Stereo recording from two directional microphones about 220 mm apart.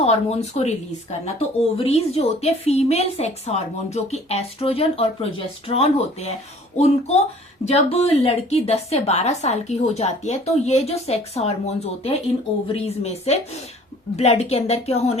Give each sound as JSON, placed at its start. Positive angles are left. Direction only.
{"t": 0.0, "sound": "a woman's voice", "side_deg": 30}